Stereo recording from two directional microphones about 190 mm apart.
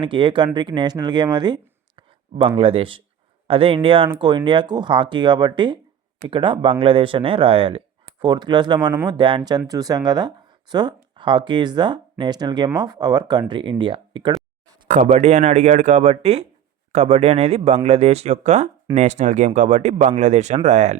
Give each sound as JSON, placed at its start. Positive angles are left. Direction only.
{"t": 0.0, "sound": "speech", "side_deg": -25}
{"t": 14.8, "sound": "speech", "side_deg": -40}